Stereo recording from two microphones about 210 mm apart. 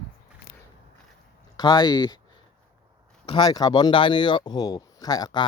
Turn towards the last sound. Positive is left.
turn(degrees=20)  # may be behind; listen again after turning